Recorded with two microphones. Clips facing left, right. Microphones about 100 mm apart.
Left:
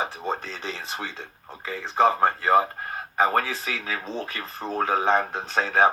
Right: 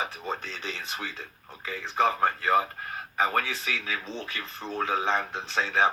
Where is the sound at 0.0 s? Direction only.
35° left (ahead or behind).